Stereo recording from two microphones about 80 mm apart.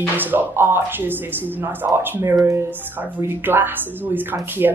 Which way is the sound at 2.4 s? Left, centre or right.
Right.